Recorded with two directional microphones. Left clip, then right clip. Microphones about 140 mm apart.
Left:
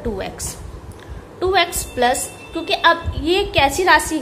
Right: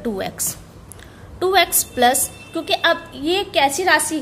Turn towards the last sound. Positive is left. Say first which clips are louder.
# left 3 dB
turn(degrees=-35)  # may be behind; listen again after turning